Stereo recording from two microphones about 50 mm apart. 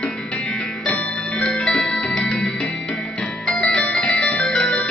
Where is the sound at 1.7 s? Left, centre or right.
Centre.